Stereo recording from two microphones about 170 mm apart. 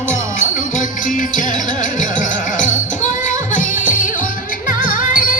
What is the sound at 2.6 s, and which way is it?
Music, 50° left (ahead or behind).